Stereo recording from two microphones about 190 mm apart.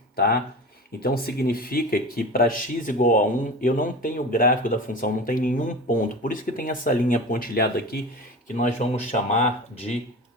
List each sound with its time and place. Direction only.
0.9 s speech: 55° left (ahead or behind)
8.5 s speech: 40° left (ahead or behind)